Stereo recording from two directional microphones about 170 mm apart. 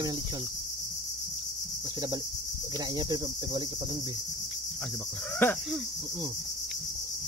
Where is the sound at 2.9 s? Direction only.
25° right (ahead or behind).